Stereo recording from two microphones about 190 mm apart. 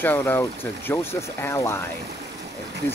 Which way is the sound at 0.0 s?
10° left (ahead or behind).